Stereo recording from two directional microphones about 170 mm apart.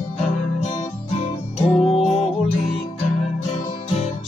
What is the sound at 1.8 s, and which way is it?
Music, 35° left (ahead or behind).